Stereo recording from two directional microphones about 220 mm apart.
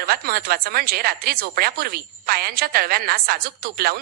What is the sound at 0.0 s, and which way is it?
Speech, 45° right (ahead or behind).